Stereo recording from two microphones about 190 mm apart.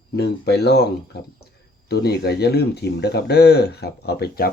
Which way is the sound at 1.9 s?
55° left (ahead or behind).